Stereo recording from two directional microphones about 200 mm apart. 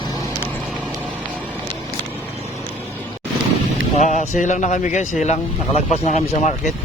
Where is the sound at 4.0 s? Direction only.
40° left (ahead or behind).